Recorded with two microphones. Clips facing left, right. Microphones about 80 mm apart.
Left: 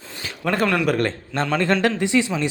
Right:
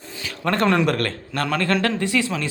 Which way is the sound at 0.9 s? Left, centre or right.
Centre.